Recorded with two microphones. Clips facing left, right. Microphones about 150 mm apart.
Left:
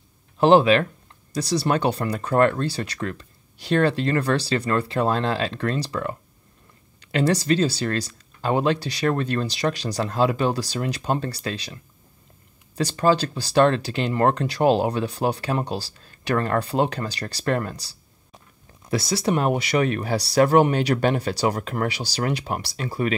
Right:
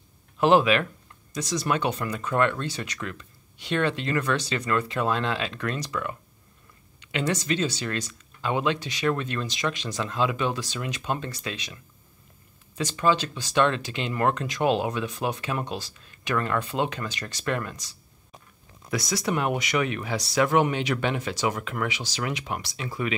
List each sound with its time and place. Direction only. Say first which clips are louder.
0.4 s speech: left 4 dB; 30° left (ahead or behind)